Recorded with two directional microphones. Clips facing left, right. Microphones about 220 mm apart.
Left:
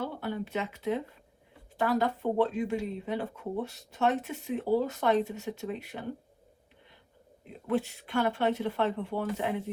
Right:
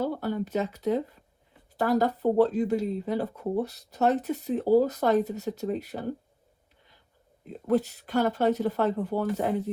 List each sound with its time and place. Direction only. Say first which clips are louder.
0.0 s speech: right 5 dB; 40° right (ahead or behind)
7.7 s speech: right 5 dB; 40° right (ahead or behind)